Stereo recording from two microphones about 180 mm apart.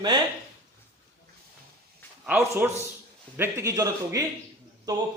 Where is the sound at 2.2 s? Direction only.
10° right (ahead or behind).